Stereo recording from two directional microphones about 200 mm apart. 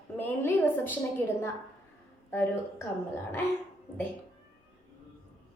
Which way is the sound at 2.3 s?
10° left (ahead or behind).